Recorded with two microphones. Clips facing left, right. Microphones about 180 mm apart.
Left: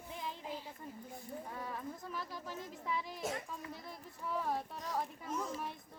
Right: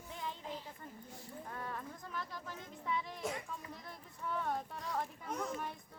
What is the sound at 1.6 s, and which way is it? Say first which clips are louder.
Speech: left 2 dB; 5° left (ahead or behind).